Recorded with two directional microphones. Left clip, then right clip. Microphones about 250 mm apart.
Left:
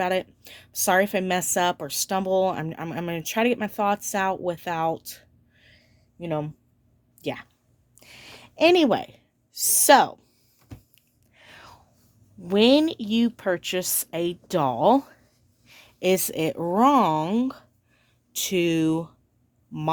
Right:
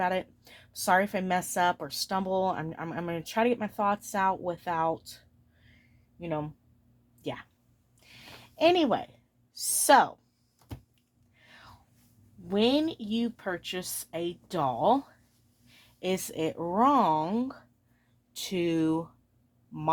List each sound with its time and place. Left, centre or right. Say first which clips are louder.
0.0 s a woman's voice: left 4 dB; left
7.9 s a sound: left 5 dB; left
11.3 s whispering: left 6 dB; left
12.5 s a woman's voice: left 8 dB; left